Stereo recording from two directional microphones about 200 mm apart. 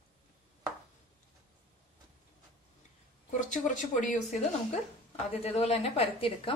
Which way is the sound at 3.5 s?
40° left (ahead or behind).